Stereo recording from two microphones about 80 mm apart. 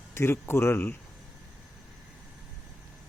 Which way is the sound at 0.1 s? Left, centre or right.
Left.